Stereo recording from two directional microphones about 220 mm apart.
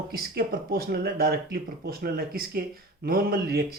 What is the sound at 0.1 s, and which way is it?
Speech, 45° right (ahead or behind).